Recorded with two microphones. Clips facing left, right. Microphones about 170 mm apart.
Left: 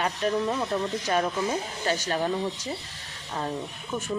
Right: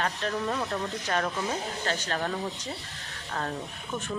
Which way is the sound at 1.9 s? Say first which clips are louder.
Left 5 dB; 10° left (ahead or behind).